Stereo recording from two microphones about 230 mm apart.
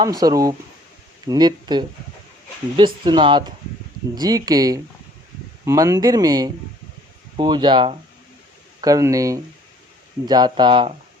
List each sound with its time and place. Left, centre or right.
0.0 s speech: centre